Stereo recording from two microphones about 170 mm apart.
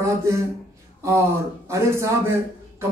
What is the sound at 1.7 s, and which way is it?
Speech, 15° right (ahead or behind).